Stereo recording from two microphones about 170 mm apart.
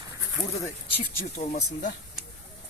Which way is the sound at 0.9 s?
45° left (ahead or behind).